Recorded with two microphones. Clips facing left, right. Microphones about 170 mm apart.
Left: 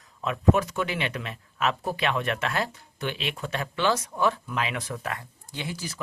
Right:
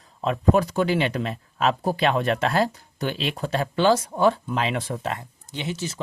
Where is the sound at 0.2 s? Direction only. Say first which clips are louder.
Right 3 dB; 35° right (ahead or behind).